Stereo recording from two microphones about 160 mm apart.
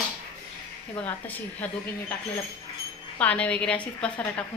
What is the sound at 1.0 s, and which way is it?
Speech, 10° left (ahead or behind).